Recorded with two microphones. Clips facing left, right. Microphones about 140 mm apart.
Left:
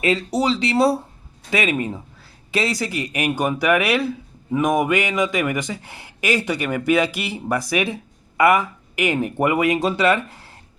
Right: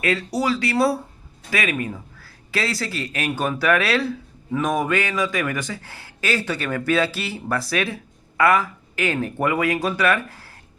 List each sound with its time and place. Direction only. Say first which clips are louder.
0.0 s speech: left 3 dB; 20° left (ahead or behind)